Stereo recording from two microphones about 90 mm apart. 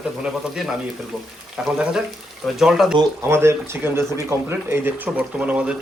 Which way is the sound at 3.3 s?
30° right (ahead or behind).